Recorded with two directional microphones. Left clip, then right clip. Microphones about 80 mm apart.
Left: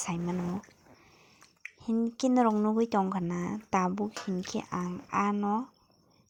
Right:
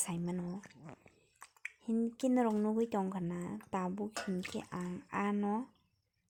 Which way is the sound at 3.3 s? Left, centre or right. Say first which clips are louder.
Left 9 dB; left.